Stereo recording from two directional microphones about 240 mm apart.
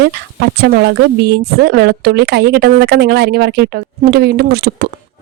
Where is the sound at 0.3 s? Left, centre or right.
Right.